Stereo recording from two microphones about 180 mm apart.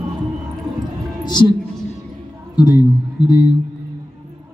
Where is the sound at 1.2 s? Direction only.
25° left (ahead or behind).